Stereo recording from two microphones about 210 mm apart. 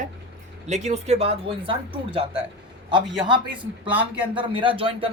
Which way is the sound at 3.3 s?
25° right (ahead or behind).